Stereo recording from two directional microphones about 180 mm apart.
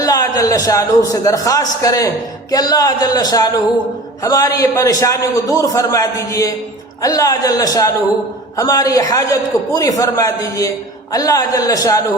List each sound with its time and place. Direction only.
0.0 s a man's voice: 20° left (ahead or behind)